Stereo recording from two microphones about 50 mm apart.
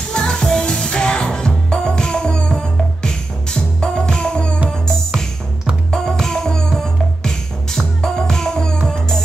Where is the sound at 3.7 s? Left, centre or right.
Centre.